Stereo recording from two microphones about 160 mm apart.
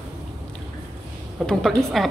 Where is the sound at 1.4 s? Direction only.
5° left (ahead or behind).